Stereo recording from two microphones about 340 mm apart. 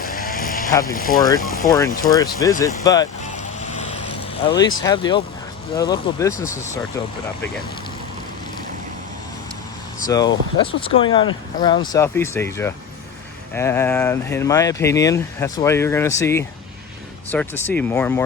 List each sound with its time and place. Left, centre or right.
0.0 s vehicle: left
0.9 s speech: left
1.6 s speech: centre
4.4 s speech: centre
10.1 s speech: centre